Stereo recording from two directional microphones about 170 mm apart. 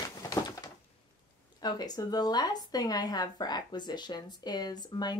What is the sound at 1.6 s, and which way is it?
Speech, 25° left (ahead or behind).